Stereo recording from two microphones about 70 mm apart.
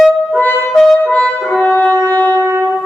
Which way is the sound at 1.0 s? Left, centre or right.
Centre.